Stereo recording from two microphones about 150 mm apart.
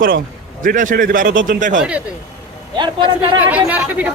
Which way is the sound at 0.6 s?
65° right (ahead or behind).